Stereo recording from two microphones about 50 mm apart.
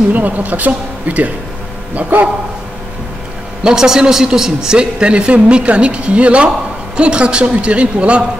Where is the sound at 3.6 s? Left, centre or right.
Centre.